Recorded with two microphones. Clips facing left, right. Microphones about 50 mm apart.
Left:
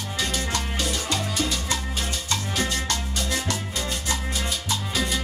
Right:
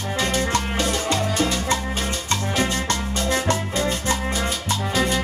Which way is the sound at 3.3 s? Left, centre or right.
Right.